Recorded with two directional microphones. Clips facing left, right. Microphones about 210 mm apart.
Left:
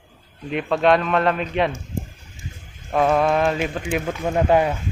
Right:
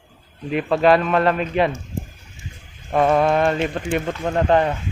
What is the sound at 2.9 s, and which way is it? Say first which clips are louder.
Speech: right 1 dB; centre (ahead or behind).